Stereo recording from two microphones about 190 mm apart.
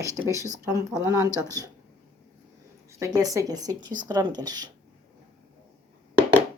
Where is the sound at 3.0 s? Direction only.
20° right (ahead or behind).